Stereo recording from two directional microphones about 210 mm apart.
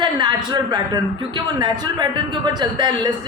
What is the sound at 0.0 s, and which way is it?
A woman's voice, 20° right (ahead or behind).